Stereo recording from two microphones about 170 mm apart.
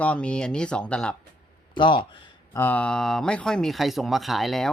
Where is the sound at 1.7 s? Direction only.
30° left (ahead or behind).